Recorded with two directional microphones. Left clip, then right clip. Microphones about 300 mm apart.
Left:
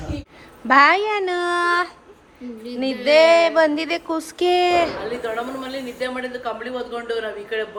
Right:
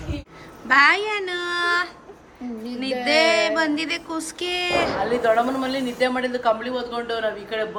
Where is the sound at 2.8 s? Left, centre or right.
Centre.